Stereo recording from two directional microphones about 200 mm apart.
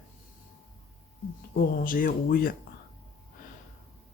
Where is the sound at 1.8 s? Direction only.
45° left (ahead or behind).